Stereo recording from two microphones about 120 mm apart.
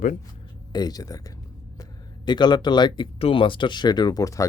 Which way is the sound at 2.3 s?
40° left (ahead or behind).